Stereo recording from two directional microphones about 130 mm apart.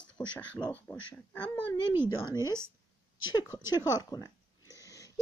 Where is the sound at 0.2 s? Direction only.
35° left (ahead or behind).